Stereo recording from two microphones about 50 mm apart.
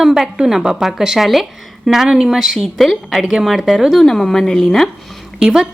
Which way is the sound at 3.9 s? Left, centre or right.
Centre.